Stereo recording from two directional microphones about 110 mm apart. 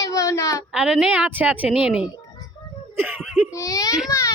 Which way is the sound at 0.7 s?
5° right (ahead or behind).